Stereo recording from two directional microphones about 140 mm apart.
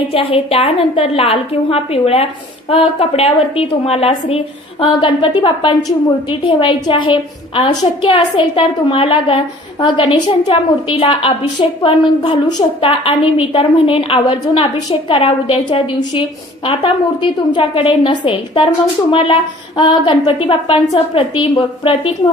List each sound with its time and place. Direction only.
0.1 s a woman's voice: 40° left (ahead or behind)
10.5 s a woman's voice: 45° left (ahead or behind)